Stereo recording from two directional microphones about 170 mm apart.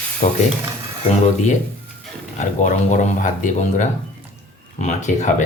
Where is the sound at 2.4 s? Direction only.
45° left (ahead or behind).